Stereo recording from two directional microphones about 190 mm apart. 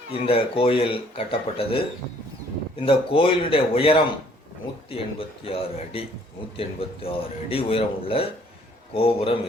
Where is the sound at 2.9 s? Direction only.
30° left (ahead or behind).